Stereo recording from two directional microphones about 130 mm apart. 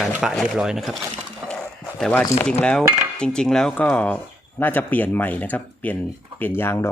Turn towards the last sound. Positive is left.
turn(degrees=15)  # may be behind; listen again after turning